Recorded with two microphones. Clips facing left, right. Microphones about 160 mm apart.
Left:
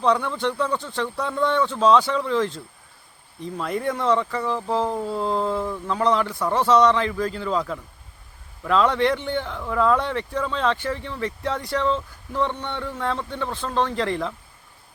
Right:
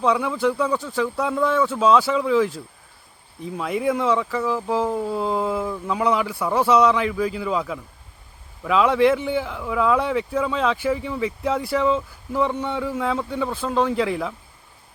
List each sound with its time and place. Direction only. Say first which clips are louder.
0.0 s a man's voice: right 1 dB; 5° right (ahead or behind)